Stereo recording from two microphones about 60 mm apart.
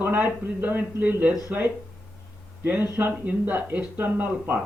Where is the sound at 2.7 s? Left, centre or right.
Right.